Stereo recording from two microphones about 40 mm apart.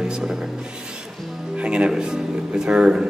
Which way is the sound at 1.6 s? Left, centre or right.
Right.